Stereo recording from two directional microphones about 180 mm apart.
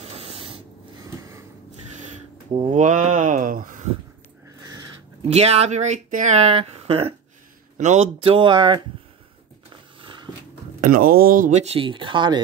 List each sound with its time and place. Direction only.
0.0 s rub: 35° right (ahead or behind)
2.5 s speech: 30° right (ahead or behind)
2.8 s speech: 45° right (ahead or behind)
4.6 s a sound: 20° right (ahead or behind)
5.3 s speech: 35° right (ahead or behind)
10.0 s dog: 25° right (ahead or behind)
10.8 s speech: 50° right (ahead or behind); by 12.4 s 25° right (ahead or behind)